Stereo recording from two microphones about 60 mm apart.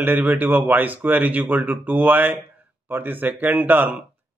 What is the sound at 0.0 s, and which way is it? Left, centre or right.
Speech, right.